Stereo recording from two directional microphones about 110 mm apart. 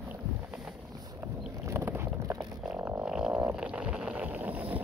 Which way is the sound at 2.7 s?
15° right (ahead or behind).